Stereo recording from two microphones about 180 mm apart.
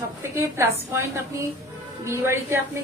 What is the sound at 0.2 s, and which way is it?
Speech, 15° right (ahead or behind).